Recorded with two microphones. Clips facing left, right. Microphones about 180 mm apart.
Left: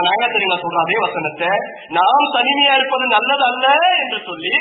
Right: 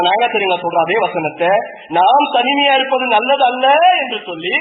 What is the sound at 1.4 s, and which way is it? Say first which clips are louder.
A man's voice: right 7 dB; 30° right (ahead or behind).